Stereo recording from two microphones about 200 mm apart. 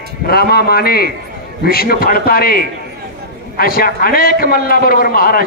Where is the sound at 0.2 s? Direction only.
50° left (ahead or behind).